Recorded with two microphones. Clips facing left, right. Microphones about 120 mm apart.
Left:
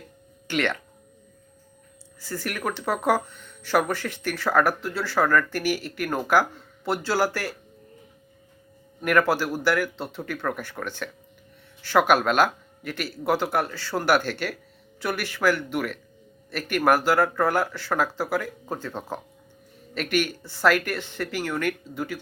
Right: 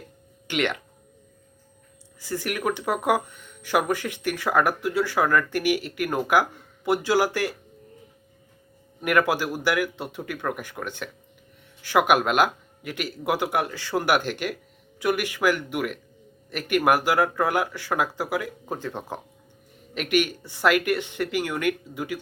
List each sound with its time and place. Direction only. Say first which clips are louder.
0.4 s speech: even; 15° right (ahead or behind)
2.2 s speech: right 3 dB; 15° right (ahead or behind)
9.0 s speech: left 1 dB; 15° right (ahead or behind)